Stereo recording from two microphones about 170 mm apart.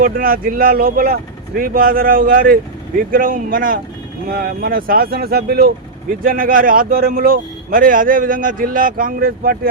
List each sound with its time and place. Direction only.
0.0 s speech: 55° right (ahead or behind)